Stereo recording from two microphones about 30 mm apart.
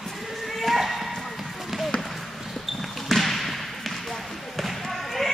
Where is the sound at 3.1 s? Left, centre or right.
Centre.